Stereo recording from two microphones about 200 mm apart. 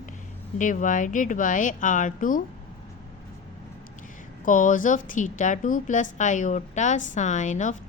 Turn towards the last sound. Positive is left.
turn(degrees=40)  # may be behind; listen again after turning